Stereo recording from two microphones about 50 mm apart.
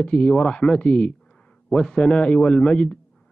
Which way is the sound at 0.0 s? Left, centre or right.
Centre.